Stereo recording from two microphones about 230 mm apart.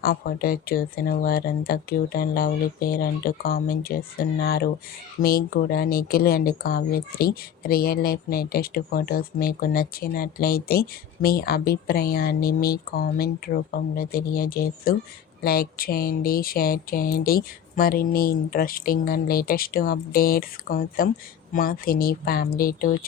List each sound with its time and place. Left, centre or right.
0.0 s speech: left